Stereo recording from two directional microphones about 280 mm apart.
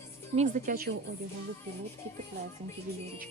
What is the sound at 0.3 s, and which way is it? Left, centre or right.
Speech, right.